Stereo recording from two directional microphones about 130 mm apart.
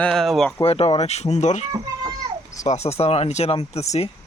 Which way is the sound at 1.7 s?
30° right (ahead or behind).